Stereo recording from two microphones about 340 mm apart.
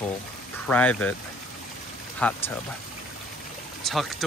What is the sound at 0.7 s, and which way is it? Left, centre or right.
Speech, centre.